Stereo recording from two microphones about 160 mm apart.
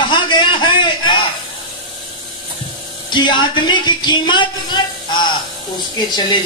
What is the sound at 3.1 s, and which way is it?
Speech, 30° left (ahead or behind).